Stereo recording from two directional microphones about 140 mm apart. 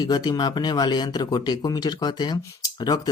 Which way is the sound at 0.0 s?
30° left (ahead or behind).